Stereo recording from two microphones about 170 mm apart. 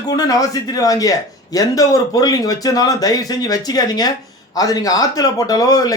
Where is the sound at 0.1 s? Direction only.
20° left (ahead or behind).